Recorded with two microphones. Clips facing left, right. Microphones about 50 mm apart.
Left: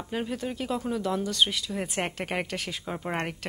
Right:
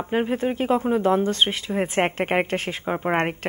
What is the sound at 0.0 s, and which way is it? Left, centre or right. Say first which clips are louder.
Speech: right 9 dB; right.